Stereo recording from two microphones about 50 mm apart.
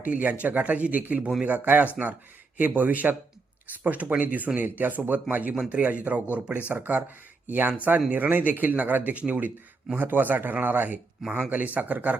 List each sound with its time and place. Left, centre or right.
0.0 s speech: right